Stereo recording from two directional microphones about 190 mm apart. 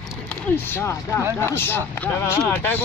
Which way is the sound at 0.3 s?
10° left (ahead or behind).